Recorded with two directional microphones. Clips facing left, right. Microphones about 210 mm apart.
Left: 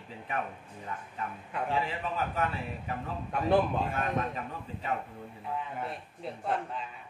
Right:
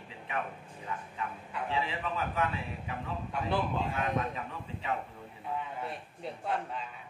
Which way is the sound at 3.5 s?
45° left (ahead or behind).